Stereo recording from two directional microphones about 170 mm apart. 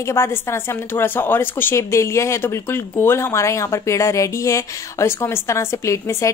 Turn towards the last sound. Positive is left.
turn(degrees=20)  # may be behind; listen again after turning